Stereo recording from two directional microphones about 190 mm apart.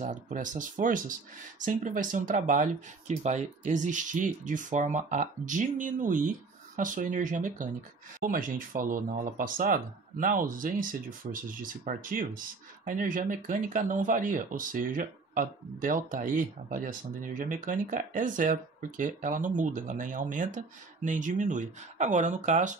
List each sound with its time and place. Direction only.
0.0 s speech: 40° right (ahead or behind)